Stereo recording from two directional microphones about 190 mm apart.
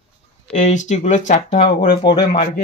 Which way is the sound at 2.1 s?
25° left (ahead or behind).